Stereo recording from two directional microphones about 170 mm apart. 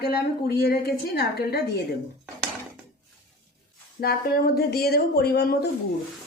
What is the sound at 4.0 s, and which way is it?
Speech, 65° left (ahead or behind).